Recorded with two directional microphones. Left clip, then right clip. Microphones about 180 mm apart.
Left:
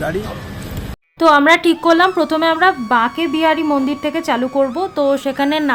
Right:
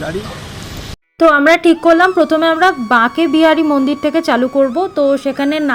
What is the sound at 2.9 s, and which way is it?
A woman's voice, 20° right (ahead or behind).